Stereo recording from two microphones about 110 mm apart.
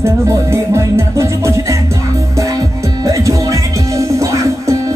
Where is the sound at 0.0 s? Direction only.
25° right (ahead or behind).